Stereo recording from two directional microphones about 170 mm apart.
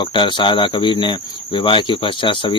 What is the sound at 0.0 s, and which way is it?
Cricket, 30° left (ahead or behind).